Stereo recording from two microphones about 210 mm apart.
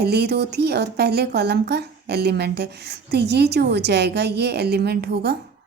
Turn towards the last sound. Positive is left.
turn(degrees=-50)  # may be behind; listen again after turning